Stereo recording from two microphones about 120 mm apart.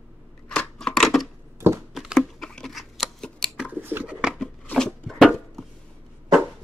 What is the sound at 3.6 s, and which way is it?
Pigeon, 15° right (ahead or behind).